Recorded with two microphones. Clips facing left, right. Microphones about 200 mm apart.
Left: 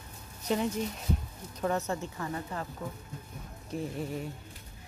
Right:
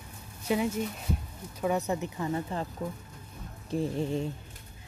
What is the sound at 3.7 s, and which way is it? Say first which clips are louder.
Speech: right 5 dB; 25° right (ahead or behind).